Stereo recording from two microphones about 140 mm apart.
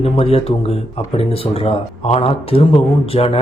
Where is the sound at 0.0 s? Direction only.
45° left (ahead or behind).